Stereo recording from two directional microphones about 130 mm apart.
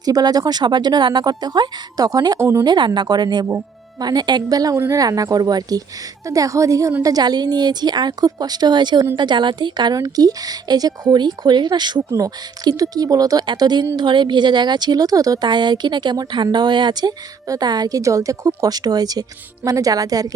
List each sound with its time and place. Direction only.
0.0 s speech: 30° right (ahead or behind)
2.6 s speech: 35° right (ahead or behind)